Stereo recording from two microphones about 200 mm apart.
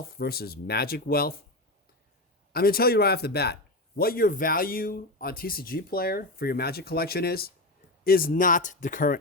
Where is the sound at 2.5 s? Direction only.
50° left (ahead or behind).